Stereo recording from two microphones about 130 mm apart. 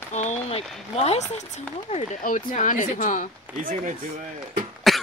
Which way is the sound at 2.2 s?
90° left.